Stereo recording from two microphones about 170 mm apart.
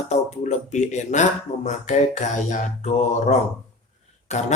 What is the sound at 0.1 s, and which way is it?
Speech, 40° left (ahead or behind).